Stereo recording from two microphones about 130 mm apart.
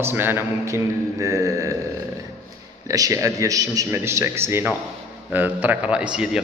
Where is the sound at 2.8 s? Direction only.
25° right (ahead or behind).